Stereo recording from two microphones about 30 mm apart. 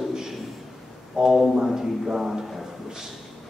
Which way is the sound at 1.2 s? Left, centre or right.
Right.